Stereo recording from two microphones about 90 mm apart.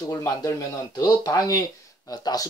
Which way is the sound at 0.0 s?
45° left (ahead or behind).